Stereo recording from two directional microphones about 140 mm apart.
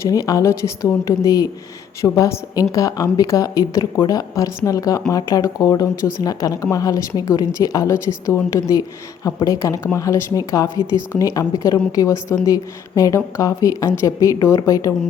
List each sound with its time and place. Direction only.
0.0 s speech: 25° left (ahead or behind)